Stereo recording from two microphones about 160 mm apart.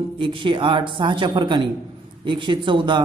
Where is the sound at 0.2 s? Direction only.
30° right (ahead or behind).